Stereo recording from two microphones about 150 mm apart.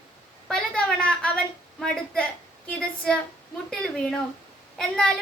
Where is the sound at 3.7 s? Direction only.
5° left (ahead or behind).